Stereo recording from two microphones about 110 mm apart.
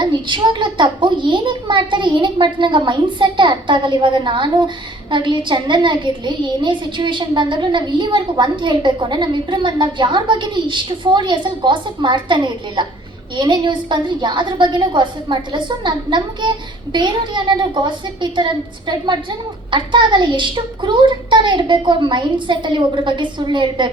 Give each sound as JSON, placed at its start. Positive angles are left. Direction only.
{"t": 0.0, "sound": "a child's voice", "side_deg": -45}